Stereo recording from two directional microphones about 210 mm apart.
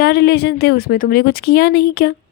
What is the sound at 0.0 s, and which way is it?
A woman's voice, 50° left (ahead or behind).